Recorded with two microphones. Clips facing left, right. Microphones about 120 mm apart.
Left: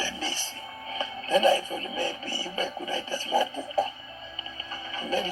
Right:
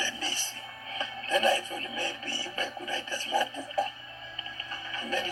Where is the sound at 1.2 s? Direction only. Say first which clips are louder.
Left 5 dB; 40° left (ahead or behind).